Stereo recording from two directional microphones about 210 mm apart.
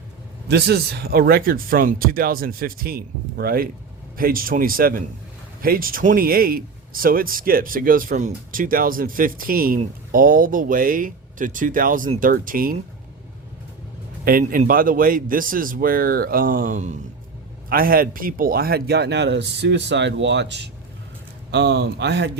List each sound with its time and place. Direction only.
0.4 s speech: 55° right (ahead or behind)
14.3 s speech: 40° right (ahead or behind)